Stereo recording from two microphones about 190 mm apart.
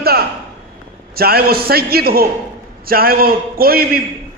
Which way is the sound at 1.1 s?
55° right (ahead or behind).